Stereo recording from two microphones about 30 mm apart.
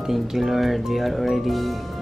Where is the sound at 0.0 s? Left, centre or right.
Centre.